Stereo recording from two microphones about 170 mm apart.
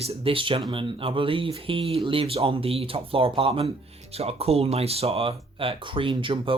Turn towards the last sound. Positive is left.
turn(degrees=-30)  # may be behind; listen again after turning